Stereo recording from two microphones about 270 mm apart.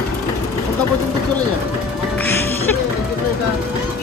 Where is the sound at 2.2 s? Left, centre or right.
Centre.